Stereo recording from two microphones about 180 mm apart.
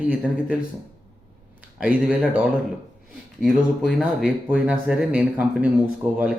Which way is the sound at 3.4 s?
Centre (ahead or behind).